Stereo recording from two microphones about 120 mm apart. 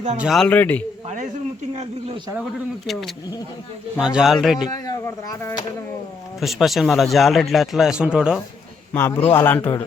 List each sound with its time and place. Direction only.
0.2 s a man's voice: centre (ahead or behind)
0.4 s a man's voice: 15° left (ahead or behind)
1.0 s a sound: 90° right
1.7 s speech: 65° right (ahead or behind)
2.8 s a man's voice: centre (ahead or behind)
4.7 s speech: 25° left (ahead or behind)
6.4 s a man's voice: centre (ahead or behind)
8.9 s a man's voice: 20° left (ahead or behind)